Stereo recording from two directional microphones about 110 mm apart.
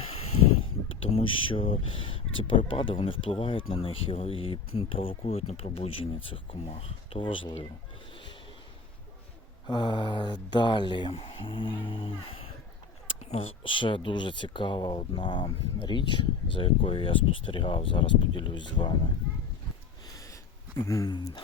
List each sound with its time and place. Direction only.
1.1 s speech: 50° left (ahead or behind)
9.6 s speech: 45° left (ahead or behind)
20.7 s speech: 25° left (ahead or behind)
21.1 s speech: 40° left (ahead or behind)